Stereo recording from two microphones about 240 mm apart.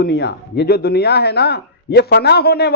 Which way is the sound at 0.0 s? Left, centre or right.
Left.